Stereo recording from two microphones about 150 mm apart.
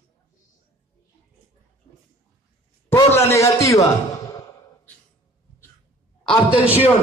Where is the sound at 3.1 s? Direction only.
20° left (ahead or behind).